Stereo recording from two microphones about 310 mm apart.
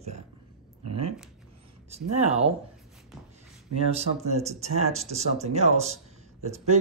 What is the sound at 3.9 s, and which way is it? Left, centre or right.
Speech, right.